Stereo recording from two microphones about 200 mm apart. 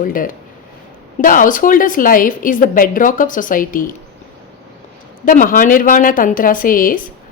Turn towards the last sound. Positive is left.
turn(degrees=45)  # may be behind; listen again after turning